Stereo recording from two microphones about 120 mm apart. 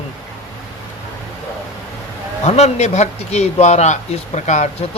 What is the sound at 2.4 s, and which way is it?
Speech, 65° left (ahead or behind).